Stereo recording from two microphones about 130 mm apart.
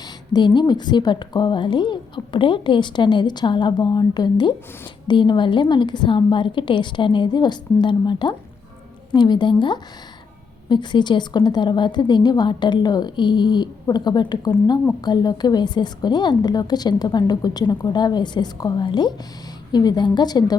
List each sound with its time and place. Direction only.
0.3 s a woman's voice: 35° left (ahead or behind)